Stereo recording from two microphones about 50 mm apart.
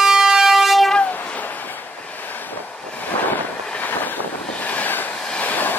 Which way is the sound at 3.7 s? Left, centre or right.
Left.